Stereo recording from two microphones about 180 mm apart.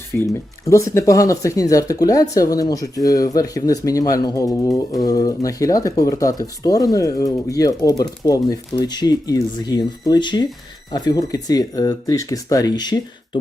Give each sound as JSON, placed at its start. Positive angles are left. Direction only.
{"t": 0.2, "sound": "speech", "side_deg": 15}